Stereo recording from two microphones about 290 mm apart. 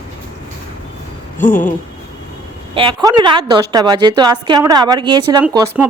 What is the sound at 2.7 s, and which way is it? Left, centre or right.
Speech, centre.